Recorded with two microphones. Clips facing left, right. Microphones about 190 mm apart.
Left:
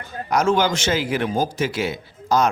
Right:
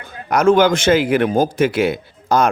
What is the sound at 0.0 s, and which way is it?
A man's voice, 55° right (ahead or behind).